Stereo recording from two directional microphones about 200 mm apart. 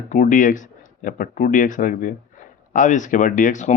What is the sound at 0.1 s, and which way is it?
Speech, 40° left (ahead or behind).